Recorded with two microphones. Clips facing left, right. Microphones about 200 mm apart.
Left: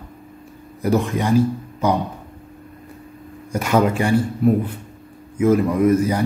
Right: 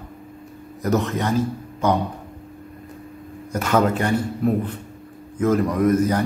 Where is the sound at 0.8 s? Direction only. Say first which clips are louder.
Left 2 dB; 10° left (ahead or behind).